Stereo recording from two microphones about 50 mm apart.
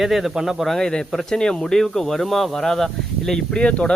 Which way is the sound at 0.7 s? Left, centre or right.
Centre.